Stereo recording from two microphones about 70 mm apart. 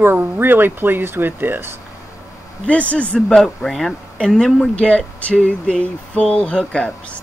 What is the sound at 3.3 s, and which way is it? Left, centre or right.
Speech, centre.